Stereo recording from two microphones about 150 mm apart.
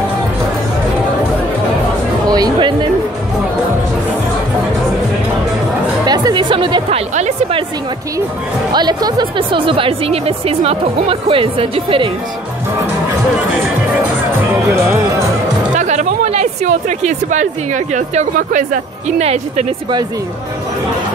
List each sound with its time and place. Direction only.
2.2 s music: 25° right (ahead or behind)
6.0 s music: 25° right (ahead or behind)
7.2 s music: 50° right (ahead or behind)
8.7 s speech: 25° right (ahead or behind)
15.7 s speech: 55° right (ahead or behind)